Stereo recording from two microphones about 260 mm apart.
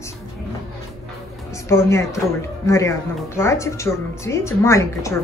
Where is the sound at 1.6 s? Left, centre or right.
Centre.